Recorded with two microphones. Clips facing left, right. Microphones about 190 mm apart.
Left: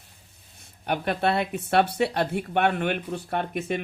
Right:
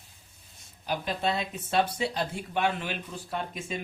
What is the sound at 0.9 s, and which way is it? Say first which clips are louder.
Speech: left 5 dB; 65° left (ahead or behind).